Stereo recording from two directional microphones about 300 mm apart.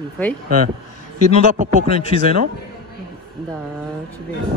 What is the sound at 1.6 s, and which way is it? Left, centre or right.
Speech, right.